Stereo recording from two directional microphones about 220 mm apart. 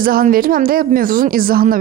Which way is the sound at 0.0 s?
40° right (ahead or behind).